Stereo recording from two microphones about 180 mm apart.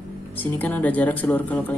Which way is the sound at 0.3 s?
10° left (ahead or behind).